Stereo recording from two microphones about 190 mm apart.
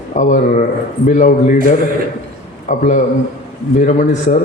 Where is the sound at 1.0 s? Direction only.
45° left (ahead or behind).